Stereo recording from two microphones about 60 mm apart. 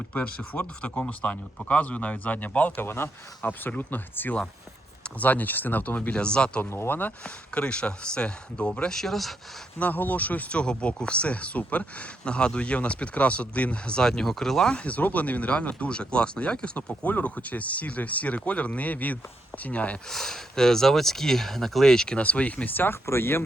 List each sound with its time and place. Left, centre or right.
0.1 s speech: left
2.8 s speech: left
6.1 s speech: centre
6.7 s speech: left
7.5 s speech: centre
9.7 s speech: left; by 14.8 s centre
14.8 s speech: left
20.1 s speech: centre; by 23.4 s left